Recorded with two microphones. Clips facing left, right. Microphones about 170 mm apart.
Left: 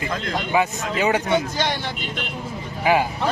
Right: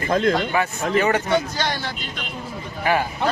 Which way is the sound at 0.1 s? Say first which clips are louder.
Right 9 dB; 55° right (ahead or behind).